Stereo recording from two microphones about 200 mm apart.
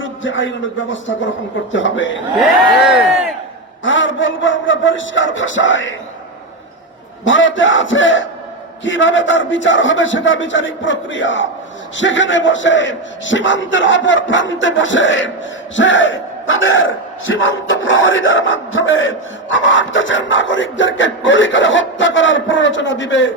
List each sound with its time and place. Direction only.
0.0 s speech: 70° left (ahead or behind)
2.4 s speech: 5° right (ahead or behind)
3.8 s speech: 70° left (ahead or behind)
7.3 s speech: 70° left (ahead or behind)